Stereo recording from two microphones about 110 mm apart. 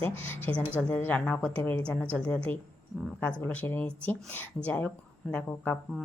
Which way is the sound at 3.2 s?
15° left (ahead or behind).